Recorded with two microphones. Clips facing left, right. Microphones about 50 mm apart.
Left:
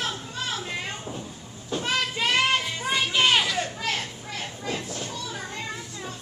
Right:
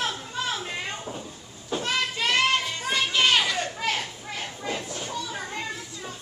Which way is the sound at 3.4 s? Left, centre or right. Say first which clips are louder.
Right 1 dB; centre.